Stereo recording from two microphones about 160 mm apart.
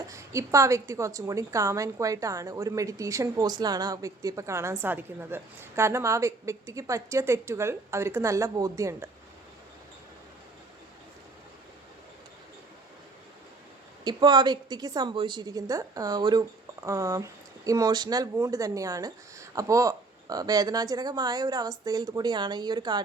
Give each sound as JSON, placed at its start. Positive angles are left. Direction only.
{"t": 0.1, "sound": "a woman's voice", "side_deg": -20}
{"t": 14.0, "sound": "a woman's voice", "side_deg": -25}